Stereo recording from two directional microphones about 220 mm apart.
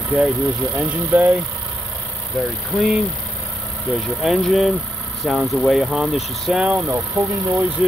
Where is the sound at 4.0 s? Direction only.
Centre (ahead or behind).